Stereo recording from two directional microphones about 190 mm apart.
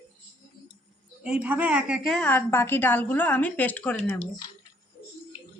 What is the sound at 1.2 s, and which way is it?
A woman's voice, 5° right (ahead or behind).